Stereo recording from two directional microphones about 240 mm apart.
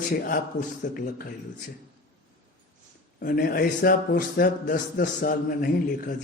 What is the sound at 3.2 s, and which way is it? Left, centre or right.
A man's voice, left.